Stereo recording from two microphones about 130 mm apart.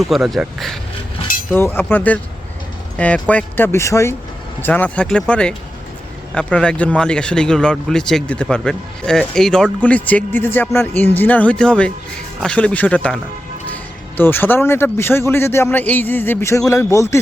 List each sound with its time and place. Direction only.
0.0 s speech: centre (ahead or behind)
1.5 s a man's voice: 15° left (ahead or behind)
14.2 s a man's voice: 15° left (ahead or behind)